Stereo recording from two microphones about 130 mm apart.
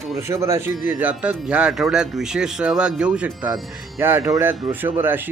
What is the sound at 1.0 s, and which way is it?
Speech, 10° right (ahead or behind).